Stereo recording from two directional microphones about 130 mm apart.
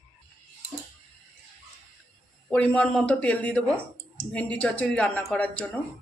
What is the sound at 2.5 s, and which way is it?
Speech, 5° left (ahead or behind).